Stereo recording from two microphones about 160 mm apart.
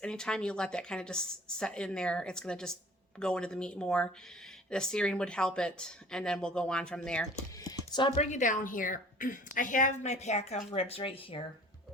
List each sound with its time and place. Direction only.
0.0 s a woman's voice: 5° left (ahead or behind)
7.6 s a woman's voice: 25° left (ahead or behind)